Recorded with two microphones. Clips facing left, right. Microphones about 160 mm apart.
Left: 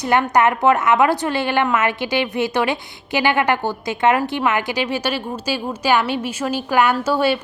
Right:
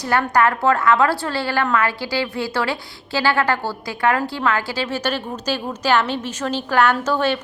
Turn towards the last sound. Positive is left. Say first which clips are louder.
# left 1 dB
turn(degrees=10)  # may be behind; listen again after turning